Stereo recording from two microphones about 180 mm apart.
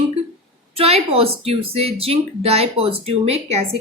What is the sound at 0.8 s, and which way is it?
Speech, 35° right (ahead or behind).